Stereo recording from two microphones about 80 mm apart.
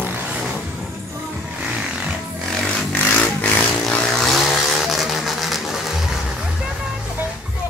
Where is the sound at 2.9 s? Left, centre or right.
Left.